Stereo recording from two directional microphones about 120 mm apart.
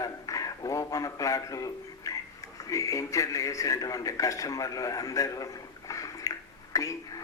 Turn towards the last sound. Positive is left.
turn(degrees=30)  # may be behind; listen again after turning